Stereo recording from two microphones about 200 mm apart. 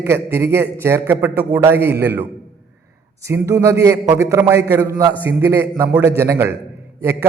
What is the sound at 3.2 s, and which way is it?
A man's voice, 15° right (ahead or behind).